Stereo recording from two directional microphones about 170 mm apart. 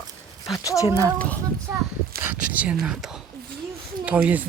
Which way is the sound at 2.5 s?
5° right (ahead or behind).